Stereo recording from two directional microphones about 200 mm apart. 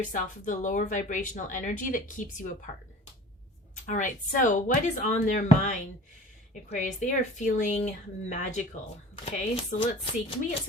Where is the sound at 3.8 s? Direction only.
40° left (ahead or behind).